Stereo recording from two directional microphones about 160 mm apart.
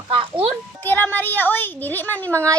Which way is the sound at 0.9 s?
10° left (ahead or behind).